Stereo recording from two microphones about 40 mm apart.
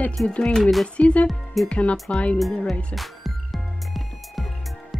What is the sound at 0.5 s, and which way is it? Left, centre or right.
Speech, centre.